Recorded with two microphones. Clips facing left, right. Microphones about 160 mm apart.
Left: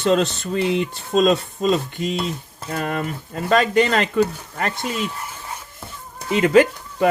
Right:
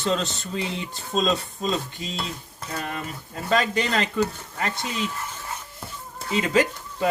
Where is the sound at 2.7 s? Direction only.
60° left (ahead or behind).